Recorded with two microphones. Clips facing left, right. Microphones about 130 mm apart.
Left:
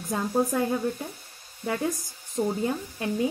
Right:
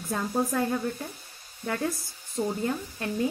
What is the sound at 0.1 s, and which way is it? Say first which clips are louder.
Speech: left 2 dB; 15° left (ahead or behind).